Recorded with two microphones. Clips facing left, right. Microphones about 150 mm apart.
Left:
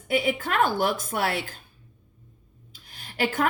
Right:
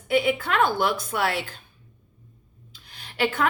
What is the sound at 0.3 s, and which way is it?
Speech, 45° left (ahead or behind).